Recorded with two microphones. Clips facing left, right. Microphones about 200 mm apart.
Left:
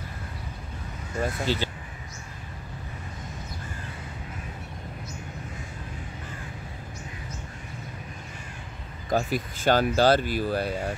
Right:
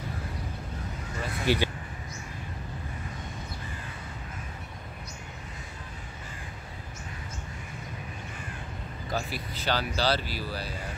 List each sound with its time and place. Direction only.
1.4 s speech: 15° right (ahead or behind)
9.1 s speech: 50° left (ahead or behind)